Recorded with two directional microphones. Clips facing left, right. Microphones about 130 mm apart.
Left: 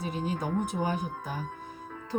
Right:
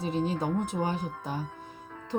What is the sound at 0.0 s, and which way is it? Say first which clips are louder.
A woman's voice: right 3 dB; 25° right (ahead or behind).